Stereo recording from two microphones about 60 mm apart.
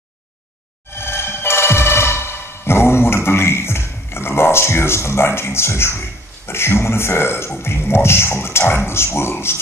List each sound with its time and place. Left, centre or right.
0.9 s music: left
6.4 s speech: left